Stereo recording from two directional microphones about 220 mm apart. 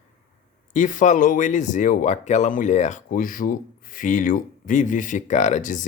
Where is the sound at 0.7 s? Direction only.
35° left (ahead or behind).